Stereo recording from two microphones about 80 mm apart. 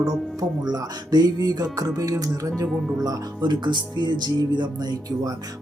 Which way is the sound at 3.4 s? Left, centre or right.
Right.